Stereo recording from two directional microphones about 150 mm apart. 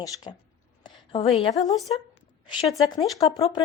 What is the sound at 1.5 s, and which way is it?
Speech, 25° left (ahead or behind).